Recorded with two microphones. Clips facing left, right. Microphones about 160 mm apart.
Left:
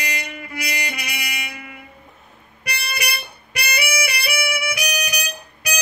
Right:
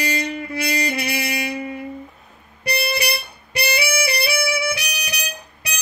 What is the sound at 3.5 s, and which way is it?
Music, 30° right (ahead or behind).